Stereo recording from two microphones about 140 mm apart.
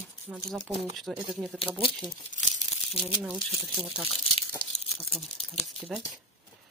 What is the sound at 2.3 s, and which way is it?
Crumpling, 65° left (ahead or behind).